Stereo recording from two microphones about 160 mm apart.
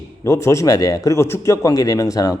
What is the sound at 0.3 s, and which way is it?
Speech, 20° left (ahead or behind).